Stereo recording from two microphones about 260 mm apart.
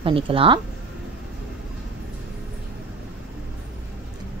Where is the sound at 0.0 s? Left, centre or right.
Right.